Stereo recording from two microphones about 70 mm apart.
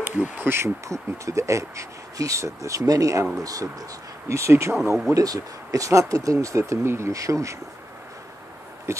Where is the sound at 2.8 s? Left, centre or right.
Right.